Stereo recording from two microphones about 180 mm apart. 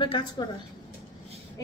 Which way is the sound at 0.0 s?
30° left (ahead or behind).